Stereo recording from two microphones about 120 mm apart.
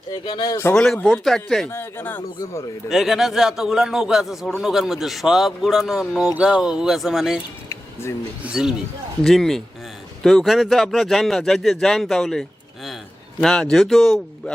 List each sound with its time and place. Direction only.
0.1 s speech: 35° left (ahead or behind)
0.7 s a man's voice: 5° left (ahead or behind)
1.7 s speech: 20° left (ahead or behind)
2.9 s a man's voice: centre (ahead or behind)
8.4 s a man's voice: 5° right (ahead or behind)